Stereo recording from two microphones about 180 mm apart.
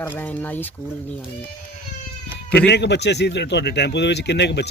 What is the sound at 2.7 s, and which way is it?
Speech, 70° left (ahead or behind).